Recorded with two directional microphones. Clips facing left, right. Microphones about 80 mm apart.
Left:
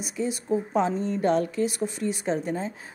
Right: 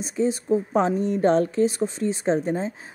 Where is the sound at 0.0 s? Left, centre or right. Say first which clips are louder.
Right 6 dB; right.